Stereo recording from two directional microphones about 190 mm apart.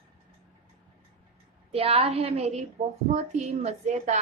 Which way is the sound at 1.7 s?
30° right (ahead or behind).